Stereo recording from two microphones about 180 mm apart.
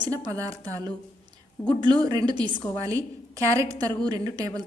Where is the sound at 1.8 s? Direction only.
25° right (ahead or behind).